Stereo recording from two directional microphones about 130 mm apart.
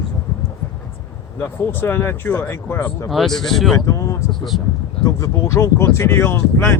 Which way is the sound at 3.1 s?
Centre (ahead or behind).